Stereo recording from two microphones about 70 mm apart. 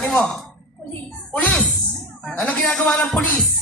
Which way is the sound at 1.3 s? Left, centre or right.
Left.